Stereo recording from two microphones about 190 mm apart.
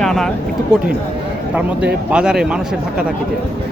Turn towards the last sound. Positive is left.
turn(degrees=-5)  # may be behind; listen again after turning